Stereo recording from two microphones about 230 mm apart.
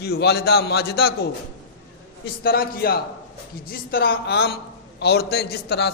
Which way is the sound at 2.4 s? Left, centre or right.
Left.